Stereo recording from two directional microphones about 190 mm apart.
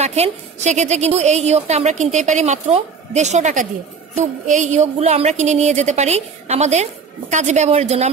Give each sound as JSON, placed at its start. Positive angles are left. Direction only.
{"t": 0.0, "sound": "a woman's voice", "side_deg": -35}